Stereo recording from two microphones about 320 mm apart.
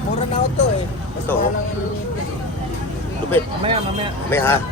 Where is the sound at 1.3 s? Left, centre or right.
Centre.